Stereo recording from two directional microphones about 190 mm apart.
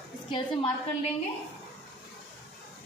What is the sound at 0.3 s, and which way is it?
Speech, 25° left (ahead or behind).